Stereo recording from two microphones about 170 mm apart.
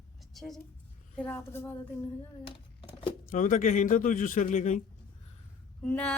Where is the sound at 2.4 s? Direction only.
30° left (ahead or behind).